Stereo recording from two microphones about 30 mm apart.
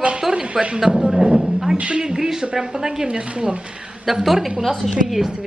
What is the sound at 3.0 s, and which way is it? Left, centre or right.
Speech, right.